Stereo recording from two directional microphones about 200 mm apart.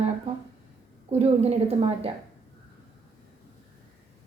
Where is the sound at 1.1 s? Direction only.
30° right (ahead or behind).